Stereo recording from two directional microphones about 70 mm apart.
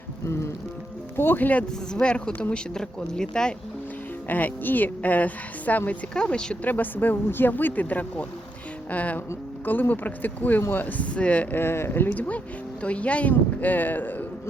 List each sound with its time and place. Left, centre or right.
1.1 s speech: left
1.9 s speech: centre
4.3 s speech: left
6.1 s speech: centre
6.7 s speech: left
11.6 s speech: left